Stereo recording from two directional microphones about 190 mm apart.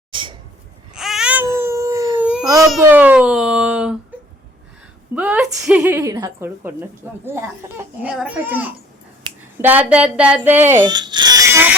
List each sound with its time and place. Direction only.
0.1 s a sound: 25° right (ahead or behind)
0.9 s baby cry: centre (ahead or behind)
2.8 s speech: 10° right (ahead or behind)
4.1 s gasp: 10° right (ahead or behind)
5.1 s speech: 5° right (ahead or behind)
10.8 s baby cry: 20° right (ahead or behind)